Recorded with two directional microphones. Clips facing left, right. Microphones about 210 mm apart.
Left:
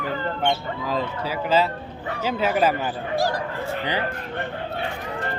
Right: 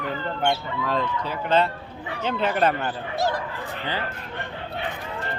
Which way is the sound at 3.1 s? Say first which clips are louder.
Left 2 dB; 25° right (ahead or behind).